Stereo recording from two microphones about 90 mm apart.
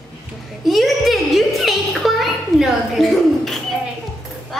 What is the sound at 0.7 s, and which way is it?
Music, centre (ahead or behind).